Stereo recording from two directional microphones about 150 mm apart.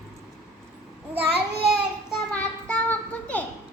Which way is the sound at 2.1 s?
10° left (ahead or behind).